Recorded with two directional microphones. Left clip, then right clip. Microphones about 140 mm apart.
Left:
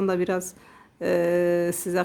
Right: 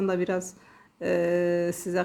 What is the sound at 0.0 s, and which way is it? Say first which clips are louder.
A woman's voice: left 2 dB; 25° left (ahead or behind).